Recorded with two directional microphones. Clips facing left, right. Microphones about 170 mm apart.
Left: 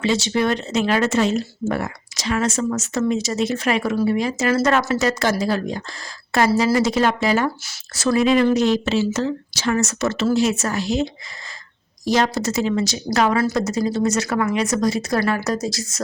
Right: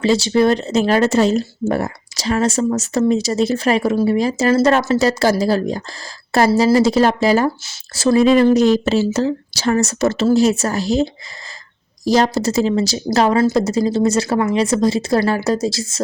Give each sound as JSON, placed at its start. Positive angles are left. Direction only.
{"t": 0.0, "sound": "a woman's voice", "side_deg": -35}